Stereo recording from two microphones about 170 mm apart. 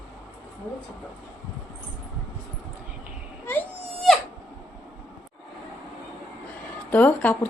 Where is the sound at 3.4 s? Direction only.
5° left (ahead or behind).